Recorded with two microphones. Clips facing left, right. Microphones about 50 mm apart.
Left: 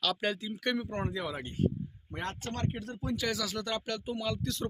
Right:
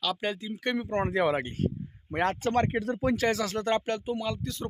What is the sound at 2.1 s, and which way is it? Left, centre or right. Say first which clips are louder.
Speech: right 11 dB; right.